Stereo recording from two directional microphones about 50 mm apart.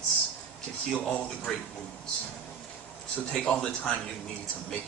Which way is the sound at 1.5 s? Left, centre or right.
Centre.